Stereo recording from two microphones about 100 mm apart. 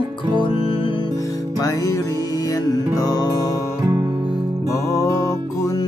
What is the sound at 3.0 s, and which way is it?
Music, 40° left (ahead or behind).